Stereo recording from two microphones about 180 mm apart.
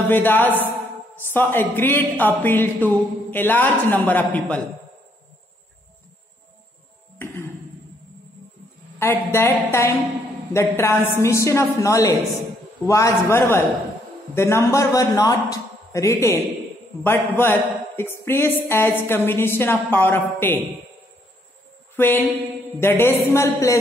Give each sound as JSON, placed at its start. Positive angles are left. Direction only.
{"t": 0.1, "sound": "speech", "side_deg": 10}
{"t": 9.0, "sound": "speech", "side_deg": 15}
{"t": 21.9, "sound": "mantra", "side_deg": 10}
{"t": 22.8, "sound": "speech", "side_deg": 15}